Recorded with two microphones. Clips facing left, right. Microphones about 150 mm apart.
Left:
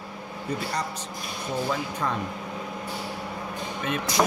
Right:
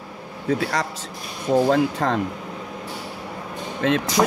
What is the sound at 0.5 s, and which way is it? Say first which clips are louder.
Speech: right 7 dB; 90° right.